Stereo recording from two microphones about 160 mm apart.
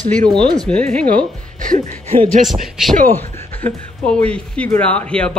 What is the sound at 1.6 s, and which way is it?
Speech, 55° right (ahead or behind).